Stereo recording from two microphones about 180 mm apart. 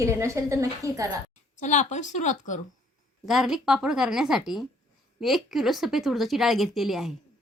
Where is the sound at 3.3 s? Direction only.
Centre (ahead or behind).